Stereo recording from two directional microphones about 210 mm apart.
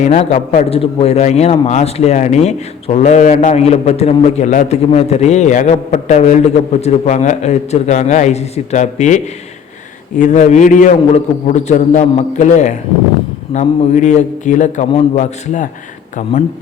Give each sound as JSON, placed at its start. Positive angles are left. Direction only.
{"t": 0.0, "sound": "a man's voice", "side_deg": 30}